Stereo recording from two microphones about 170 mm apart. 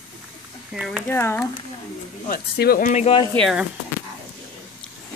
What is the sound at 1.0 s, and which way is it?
Speech, 10° left (ahead or behind).